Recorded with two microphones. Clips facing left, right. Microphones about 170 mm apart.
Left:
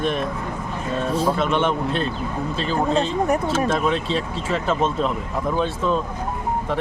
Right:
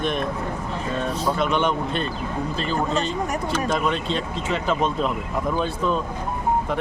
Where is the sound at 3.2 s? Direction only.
30° left (ahead or behind).